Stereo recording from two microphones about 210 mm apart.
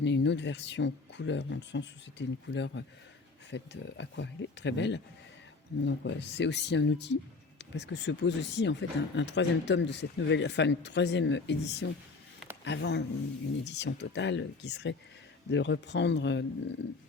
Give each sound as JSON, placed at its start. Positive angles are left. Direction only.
{"t": 0.0, "sound": "speech", "side_deg": 55}